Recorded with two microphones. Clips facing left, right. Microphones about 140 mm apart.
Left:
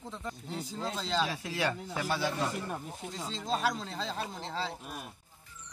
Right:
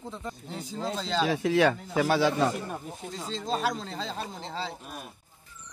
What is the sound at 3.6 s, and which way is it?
Speech, 25° right (ahead or behind).